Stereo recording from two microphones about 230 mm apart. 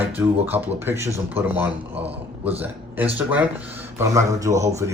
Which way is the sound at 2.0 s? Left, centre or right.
Right.